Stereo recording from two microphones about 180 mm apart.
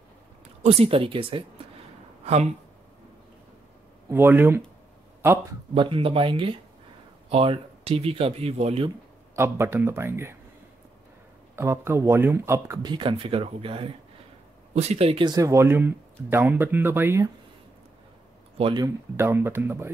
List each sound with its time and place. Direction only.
0.7 s speech: 35° right (ahead or behind)
4.1 s speech: 10° right (ahead or behind)
5.8 s speech: 30° right (ahead or behind)
9.3 s speech: 15° right (ahead or behind)
11.5 s speech: 15° right (ahead or behind)
18.6 s speech: 25° right (ahead or behind)
19.1 s speech: 15° right (ahead or behind)